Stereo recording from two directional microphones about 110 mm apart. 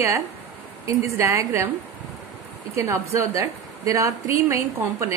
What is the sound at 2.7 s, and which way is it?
A woman's voice, 25° right (ahead or behind).